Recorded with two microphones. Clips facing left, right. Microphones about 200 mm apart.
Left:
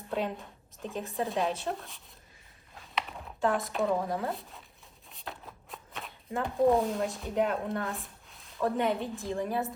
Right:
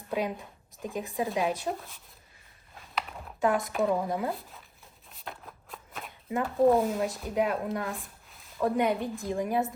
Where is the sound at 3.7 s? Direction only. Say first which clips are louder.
Right 2 dB; 5° right (ahead or behind).